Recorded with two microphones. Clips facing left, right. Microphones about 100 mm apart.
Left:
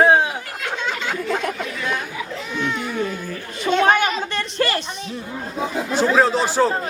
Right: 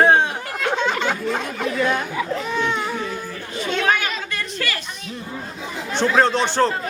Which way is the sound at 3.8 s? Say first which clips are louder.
Left 4 dB; 30° left (ahead or behind).